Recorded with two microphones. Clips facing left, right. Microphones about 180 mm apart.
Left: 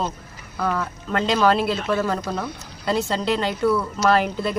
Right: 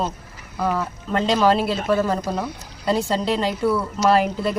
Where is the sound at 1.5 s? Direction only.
35° right (ahead or behind).